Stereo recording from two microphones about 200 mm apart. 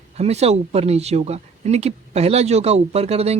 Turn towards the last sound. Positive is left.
turn(degrees=-30)  # may be behind; listen again after turning